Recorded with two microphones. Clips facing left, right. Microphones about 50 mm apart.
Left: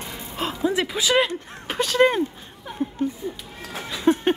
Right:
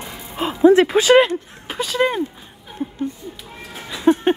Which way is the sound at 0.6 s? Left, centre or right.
Right.